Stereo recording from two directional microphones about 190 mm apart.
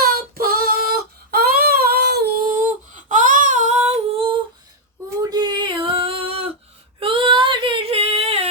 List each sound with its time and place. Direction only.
0.0 s child singing: 50° right (ahead or behind); by 4.4 s 30° right (ahead or behind)
5.3 s a sound: 20° right (ahead or behind)
7.0 s female singing: 25° right (ahead or behind)